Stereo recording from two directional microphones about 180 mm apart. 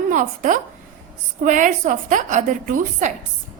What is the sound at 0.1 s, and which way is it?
A woman's voice, 45° right (ahead or behind).